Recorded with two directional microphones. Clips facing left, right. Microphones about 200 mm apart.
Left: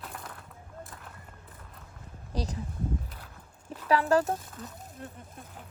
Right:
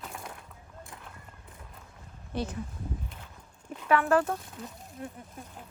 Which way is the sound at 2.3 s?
35° left (ahead or behind).